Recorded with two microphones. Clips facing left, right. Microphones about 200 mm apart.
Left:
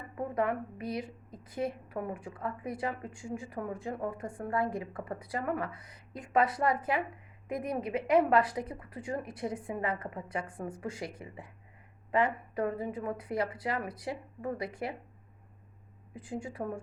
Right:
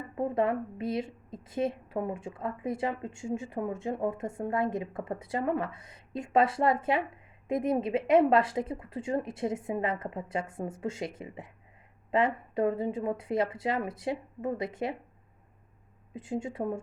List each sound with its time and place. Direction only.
0.2 s a woman's voice: 25° right (ahead or behind)
16.1 s a woman's voice: 25° right (ahead or behind)